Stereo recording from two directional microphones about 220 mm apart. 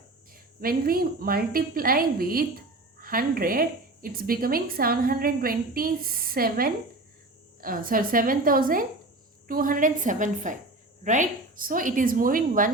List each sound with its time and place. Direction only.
0.6 s a woman's voice: 40° right (ahead or behind)